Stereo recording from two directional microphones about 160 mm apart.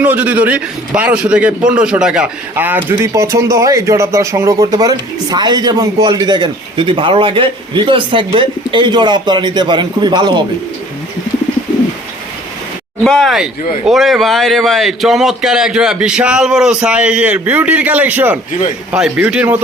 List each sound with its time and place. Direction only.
0.0 s a man's voice: 10° right (ahead or behind); by 10.4 s 30° right (ahead or behind)
13.1 s a man's voice: centre (ahead or behind)